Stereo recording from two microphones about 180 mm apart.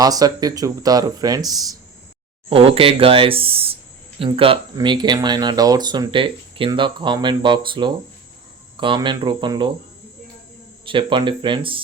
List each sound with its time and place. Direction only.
0.0 s speech: 20° right (ahead or behind)
2.5 s speech: 30° right (ahead or behind)
10.8 s speech: 25° right (ahead or behind)